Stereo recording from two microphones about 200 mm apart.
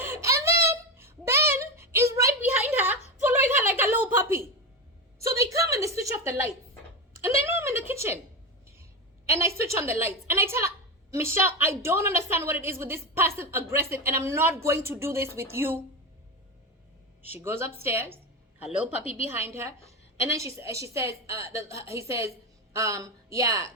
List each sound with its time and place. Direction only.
0.0 s a sound: 10° right (ahead or behind)
9.2 s a woman's voice: 15° right (ahead or behind)
17.2 s a woman's voice: 10° right (ahead or behind)
19.5 s a woman's voice: 15° right (ahead or behind)